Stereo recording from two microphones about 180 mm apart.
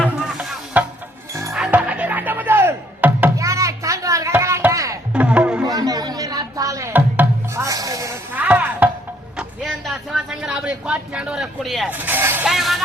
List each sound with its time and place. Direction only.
0.0 s music: centre (ahead or behind); by 5.2 s 15° right (ahead or behind)
5.2 s music: 5° right (ahead or behind)
5.6 s music: 20° right (ahead or behind)
9.4 s a sound: 5° right (ahead or behind)
12.0 s speech: 10° right (ahead or behind)
12.5 s music: centre (ahead or behind)